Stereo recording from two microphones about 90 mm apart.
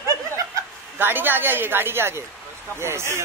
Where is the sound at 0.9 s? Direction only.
25° right (ahead or behind).